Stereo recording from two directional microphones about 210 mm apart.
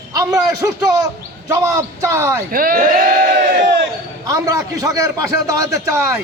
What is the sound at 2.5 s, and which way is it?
Speech, 40° right (ahead or behind).